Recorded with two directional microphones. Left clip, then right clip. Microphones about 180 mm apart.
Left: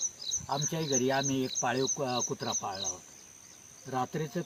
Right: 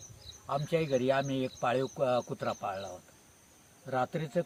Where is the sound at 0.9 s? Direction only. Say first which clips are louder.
Left 2 dB; 20° right (ahead or behind).